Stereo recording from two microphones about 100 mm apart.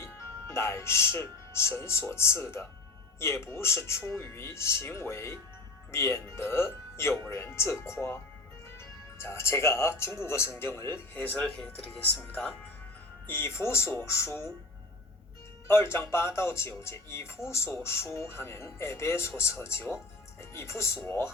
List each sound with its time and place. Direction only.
0.0 s speech: 25° left (ahead or behind)
15.6 s speech: 25° left (ahead or behind)